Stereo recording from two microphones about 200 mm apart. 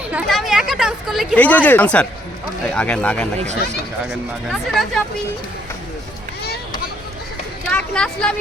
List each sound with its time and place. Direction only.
0.1 s a sound: centre (ahead or behind)
0.7 s a woman's voice: centre (ahead or behind)
3.3 s speech: 35° right (ahead or behind)
7.7 s speech: 5° left (ahead or behind)